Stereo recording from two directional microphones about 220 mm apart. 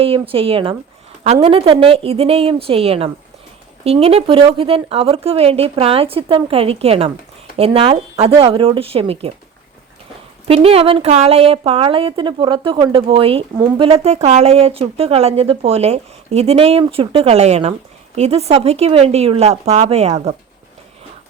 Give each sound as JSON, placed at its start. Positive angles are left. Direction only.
{"t": 0.0, "sound": "a woman's voice", "side_deg": -25}
{"t": 10.5, "sound": "a woman's voice", "side_deg": -25}